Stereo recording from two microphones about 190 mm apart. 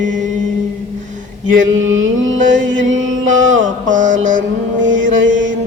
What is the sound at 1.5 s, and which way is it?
Mantra, 90° right.